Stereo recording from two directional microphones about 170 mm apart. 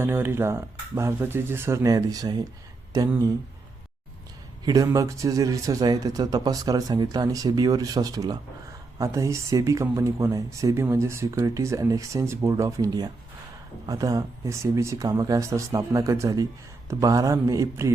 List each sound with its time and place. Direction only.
0.0 s speech: 15° right (ahead or behind)
4.6 s speech: 20° right (ahead or behind)